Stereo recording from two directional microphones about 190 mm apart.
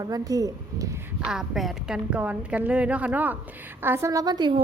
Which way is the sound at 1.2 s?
Centre (ahead or behind).